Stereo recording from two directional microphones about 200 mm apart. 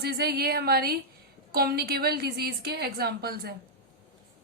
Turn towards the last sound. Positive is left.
turn(degrees=-50)  # may be behind; listen again after turning